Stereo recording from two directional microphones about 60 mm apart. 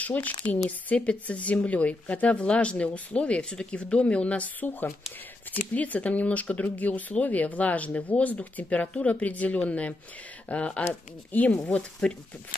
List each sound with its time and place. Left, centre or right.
0.0 s a woman's voice: left